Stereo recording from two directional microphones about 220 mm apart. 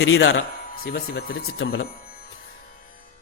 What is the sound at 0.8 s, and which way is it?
A man's voice, 45° left (ahead or behind).